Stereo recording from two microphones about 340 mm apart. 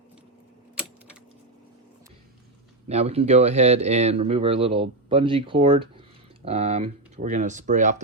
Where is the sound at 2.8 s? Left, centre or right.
Centre.